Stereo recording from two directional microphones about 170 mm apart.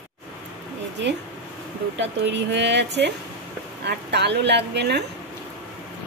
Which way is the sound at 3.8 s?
80° right.